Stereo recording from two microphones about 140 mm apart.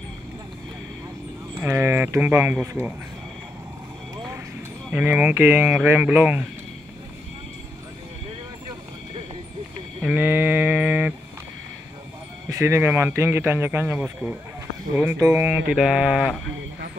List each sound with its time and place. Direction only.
1.6 s speech: 15° right (ahead or behind)
4.9 s speech: 10° right (ahead or behind)
10.0 s speech: 15° right (ahead or behind)
12.4 s speech: 20° right (ahead or behind); by 16.3 s centre (ahead or behind)